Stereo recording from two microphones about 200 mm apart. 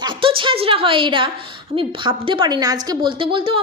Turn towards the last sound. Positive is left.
turn(degrees=-25)  # may be behind; listen again after turning